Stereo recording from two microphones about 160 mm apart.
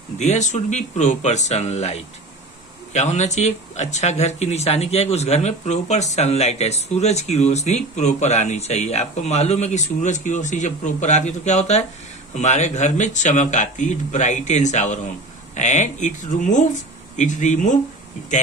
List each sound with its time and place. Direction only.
0.2 s speech: 45° left (ahead or behind)